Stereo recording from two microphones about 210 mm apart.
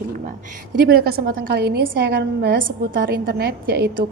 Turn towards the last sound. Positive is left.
turn(degrees=-50)  # may be behind; listen again after turning